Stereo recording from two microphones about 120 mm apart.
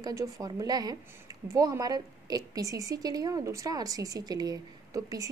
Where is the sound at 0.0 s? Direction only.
30° right (ahead or behind).